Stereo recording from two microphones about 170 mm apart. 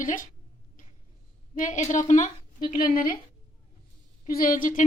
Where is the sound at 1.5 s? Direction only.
45° left (ahead or behind).